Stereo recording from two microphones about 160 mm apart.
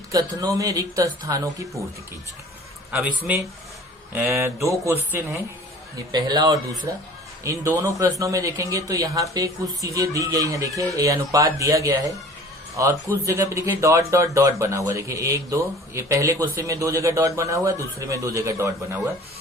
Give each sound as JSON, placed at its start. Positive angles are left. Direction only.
{"t": 0.1, "sound": "speech", "side_deg": -20}
{"t": 2.9, "sound": "speech", "side_deg": -10}
{"t": 6.1, "sound": "speech", "side_deg": -25}